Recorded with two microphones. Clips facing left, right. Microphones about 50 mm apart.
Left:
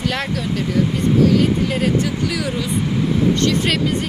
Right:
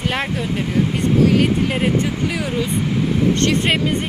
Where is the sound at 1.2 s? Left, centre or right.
Right.